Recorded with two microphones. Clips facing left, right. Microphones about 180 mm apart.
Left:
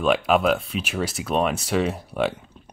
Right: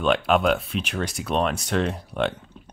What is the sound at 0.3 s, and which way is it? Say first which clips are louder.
Speech: left 1 dB; centre (ahead or behind).